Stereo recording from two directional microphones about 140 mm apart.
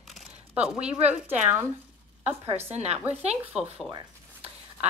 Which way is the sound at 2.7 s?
50° right (ahead or behind).